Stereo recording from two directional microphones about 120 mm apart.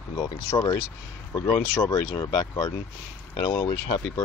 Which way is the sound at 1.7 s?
30° left (ahead or behind).